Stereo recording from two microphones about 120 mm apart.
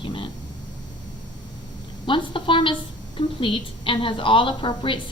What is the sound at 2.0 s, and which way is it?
A woman's voice, 45° left (ahead or behind).